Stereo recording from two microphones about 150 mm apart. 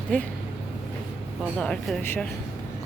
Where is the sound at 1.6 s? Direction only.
5° left (ahead or behind).